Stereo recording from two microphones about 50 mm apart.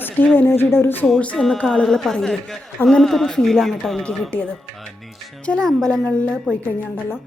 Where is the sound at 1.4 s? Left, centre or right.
Centre.